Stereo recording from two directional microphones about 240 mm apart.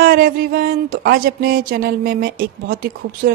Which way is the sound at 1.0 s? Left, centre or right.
Right.